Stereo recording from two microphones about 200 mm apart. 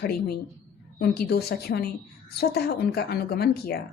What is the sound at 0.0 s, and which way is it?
A woman's voice, 50° left (ahead or behind).